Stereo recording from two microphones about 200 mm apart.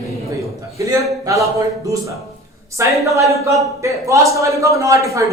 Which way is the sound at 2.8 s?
15° right (ahead or behind).